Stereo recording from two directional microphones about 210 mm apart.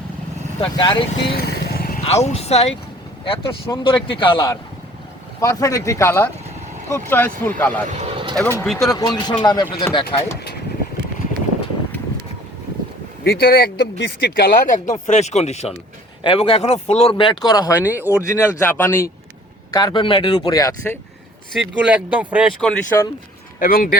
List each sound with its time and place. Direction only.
0.6 s speech: 25° left (ahead or behind)
1.4 s vehicle: 50° left (ahead or behind)
2.0 s speech: 30° left (ahead or behind); by 7.9 s 10° left (ahead or behind)
7.9 s vehicle: 30° right (ahead or behind)
8.4 s speech: 10° left (ahead or behind)
8.6 s speech: centre (ahead or behind)
8.9 s speech: 20° left (ahead or behind)
13.2 s speech: 50° left (ahead or behind); by 17.7 s 20° left (ahead or behind)
17.8 s speech: 10° right (ahead or behind)
18.1 s speech: 15° left (ahead or behind)
21.5 s speech: 5° right (ahead or behind)
22.6 s speech: 5° left (ahead or behind)
23.6 s speech: 45° left (ahead or behind)